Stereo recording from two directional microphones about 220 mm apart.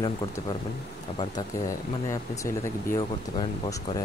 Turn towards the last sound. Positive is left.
turn(degrees=15)  # may be behind; listen again after turning